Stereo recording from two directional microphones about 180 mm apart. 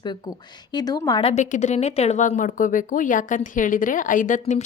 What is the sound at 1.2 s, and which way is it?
A woman's voice, 35° left (ahead or behind).